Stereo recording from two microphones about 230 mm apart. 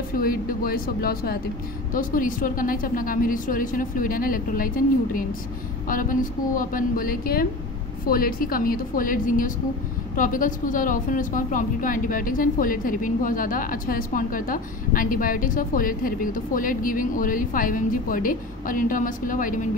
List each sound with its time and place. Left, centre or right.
0.2 s a woman's voice: left